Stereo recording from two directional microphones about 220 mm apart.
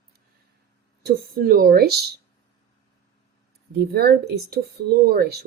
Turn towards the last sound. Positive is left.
turn(degrees=-45)  # may be behind; listen again after turning